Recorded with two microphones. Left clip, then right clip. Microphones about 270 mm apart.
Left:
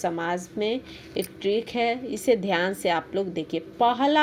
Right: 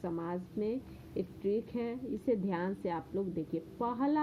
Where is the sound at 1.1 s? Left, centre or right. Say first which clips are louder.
Left 9 dB; left.